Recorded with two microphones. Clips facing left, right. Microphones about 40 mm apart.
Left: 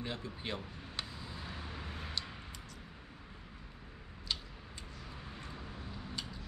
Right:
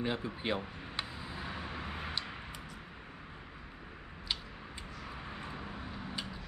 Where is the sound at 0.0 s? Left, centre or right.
Right.